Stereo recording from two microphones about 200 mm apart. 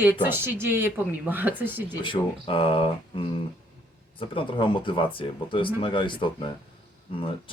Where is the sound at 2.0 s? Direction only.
25° left (ahead or behind).